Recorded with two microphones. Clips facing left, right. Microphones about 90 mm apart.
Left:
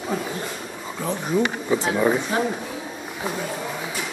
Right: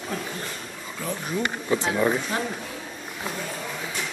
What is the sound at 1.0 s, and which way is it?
Speech, 20° left (ahead or behind).